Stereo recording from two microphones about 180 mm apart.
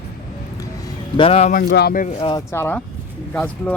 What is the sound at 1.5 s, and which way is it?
Speech, 55° left (ahead or behind).